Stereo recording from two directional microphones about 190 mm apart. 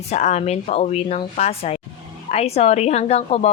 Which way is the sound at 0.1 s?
35° left (ahead or behind).